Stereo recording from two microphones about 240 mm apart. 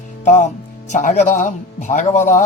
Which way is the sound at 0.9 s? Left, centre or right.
Left.